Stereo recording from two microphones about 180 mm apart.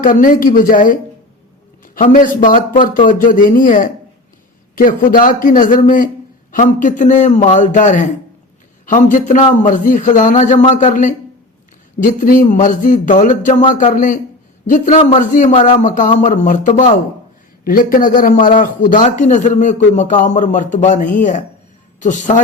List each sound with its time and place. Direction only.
0.0 s a man's voice: 50° left (ahead or behind)